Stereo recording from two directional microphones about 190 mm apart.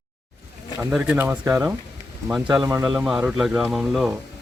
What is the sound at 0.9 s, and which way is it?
A man's voice, 5° right (ahead or behind).